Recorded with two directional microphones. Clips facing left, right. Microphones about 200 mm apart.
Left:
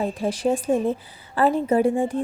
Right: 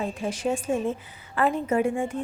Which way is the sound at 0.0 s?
35° left (ahead or behind).